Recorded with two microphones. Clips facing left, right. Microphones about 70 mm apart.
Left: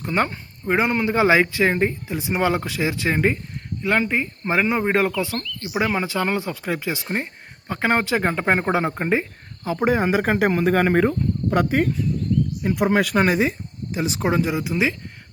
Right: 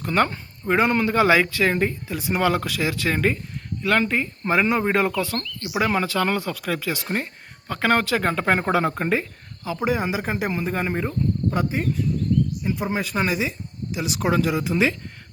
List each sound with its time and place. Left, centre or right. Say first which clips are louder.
0.0 s speech: right 1 dB; centre
9.6 s speech: left 4 dB; left; by 14.7 s centre
14.7 s speech: right 2 dB; centre